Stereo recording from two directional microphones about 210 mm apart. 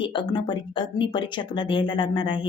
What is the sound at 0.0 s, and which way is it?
A woman's voice, 20° left (ahead or behind).